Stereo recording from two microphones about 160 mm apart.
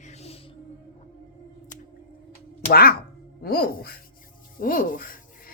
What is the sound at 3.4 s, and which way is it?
Speech, 70° left (ahead or behind).